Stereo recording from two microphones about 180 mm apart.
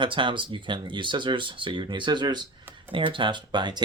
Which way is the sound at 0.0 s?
25° right (ahead or behind).